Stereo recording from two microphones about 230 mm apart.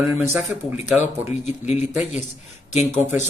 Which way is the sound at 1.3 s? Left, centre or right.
Left.